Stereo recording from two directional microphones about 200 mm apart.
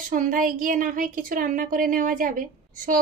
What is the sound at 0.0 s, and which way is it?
A woman's voice, 40° right (ahead or behind).